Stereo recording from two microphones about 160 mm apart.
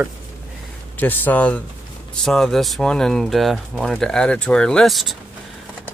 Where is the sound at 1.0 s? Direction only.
10° left (ahead or behind).